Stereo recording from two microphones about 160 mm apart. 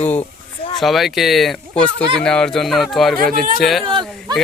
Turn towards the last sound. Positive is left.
turn(degrees=-30)  # may be behind; listen again after turning